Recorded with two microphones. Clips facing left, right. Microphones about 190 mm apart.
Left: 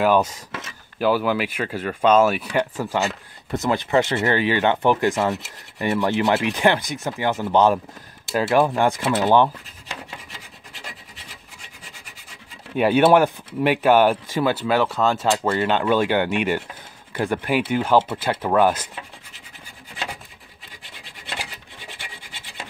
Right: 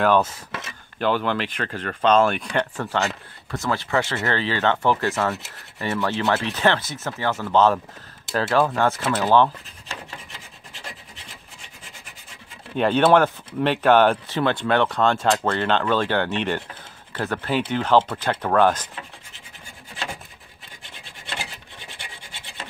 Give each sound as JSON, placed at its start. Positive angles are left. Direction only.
{"t": 0.0, "sound": "speech", "side_deg": 10}
{"t": 12.7, "sound": "speech", "side_deg": 10}